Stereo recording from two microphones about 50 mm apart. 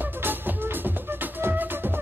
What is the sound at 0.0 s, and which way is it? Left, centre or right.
Music, right.